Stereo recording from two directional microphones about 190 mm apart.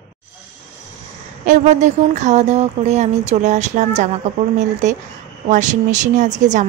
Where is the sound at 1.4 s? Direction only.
40° right (ahead or behind).